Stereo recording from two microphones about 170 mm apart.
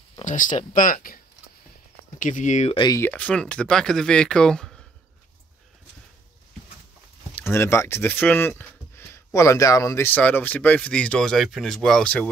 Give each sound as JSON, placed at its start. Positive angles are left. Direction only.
{"t": 0.2, "sound": "speech", "side_deg": 50}
{"t": 2.7, "sound": "speech", "side_deg": 25}
{"t": 3.0, "sound": "speech", "side_deg": 10}
{"t": 7.5, "sound": "speech", "side_deg": 15}